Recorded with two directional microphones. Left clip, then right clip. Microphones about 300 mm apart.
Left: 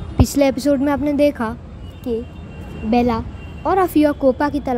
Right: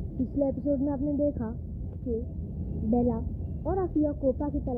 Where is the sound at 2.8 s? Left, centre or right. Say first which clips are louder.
Left 10 dB; left.